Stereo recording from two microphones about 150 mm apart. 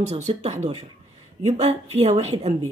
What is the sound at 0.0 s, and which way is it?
Speech, 45° right (ahead or behind).